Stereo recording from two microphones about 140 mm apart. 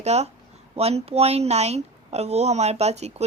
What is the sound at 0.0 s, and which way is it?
A woman's voice, 50° right (ahead or behind).